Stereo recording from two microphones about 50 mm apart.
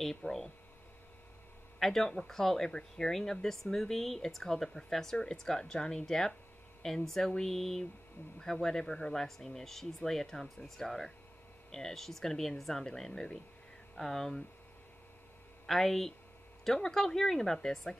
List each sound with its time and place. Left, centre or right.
0.0 s speech: centre
1.8 s speech: centre
15.6 s speech: centre